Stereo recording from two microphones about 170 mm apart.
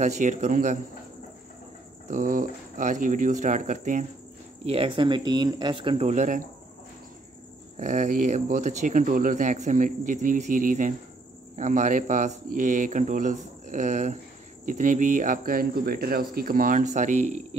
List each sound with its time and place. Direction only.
0.0 s speech: 45° right (ahead or behind)
2.0 s speech: 50° right (ahead or behind)
4.6 s speech: 30° right (ahead or behind)
7.8 s speech: 45° right (ahead or behind)